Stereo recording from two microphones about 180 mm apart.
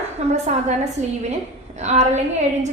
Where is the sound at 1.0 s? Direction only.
40° right (ahead or behind).